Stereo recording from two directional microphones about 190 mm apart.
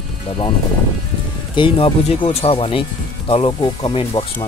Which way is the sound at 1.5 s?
25° left (ahead or behind).